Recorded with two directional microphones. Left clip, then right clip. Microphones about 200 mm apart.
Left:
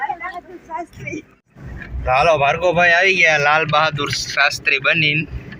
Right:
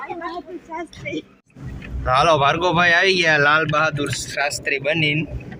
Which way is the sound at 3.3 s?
15° right (ahead or behind).